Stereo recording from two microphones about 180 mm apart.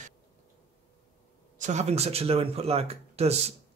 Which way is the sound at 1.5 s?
40° right (ahead or behind).